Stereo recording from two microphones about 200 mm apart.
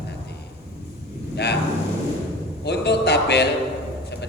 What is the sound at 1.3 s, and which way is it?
Speech, 55° left (ahead or behind).